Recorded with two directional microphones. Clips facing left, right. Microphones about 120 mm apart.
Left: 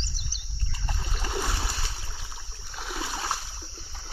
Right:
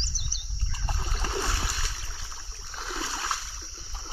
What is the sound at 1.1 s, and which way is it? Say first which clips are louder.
Splash: left 1 dB; 15° left (ahead or behind).